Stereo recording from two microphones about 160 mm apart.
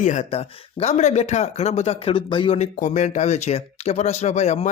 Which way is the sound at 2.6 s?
50° left (ahead or behind).